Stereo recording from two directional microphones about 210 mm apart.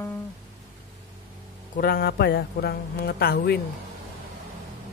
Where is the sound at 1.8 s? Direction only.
45° left (ahead or behind).